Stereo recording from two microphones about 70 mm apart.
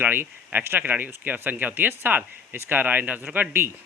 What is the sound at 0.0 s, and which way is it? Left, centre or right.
Speech, right.